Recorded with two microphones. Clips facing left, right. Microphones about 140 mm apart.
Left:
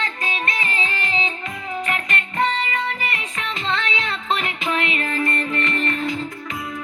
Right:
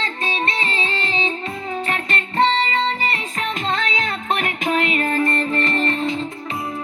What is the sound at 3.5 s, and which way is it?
Music, 45° right (ahead or behind).